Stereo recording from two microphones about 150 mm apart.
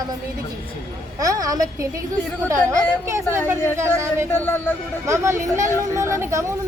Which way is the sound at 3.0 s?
20° right (ahead or behind).